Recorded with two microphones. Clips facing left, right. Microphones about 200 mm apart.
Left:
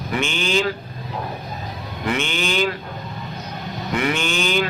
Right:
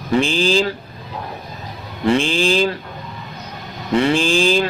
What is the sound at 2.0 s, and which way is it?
Mantra, 30° right (ahead or behind).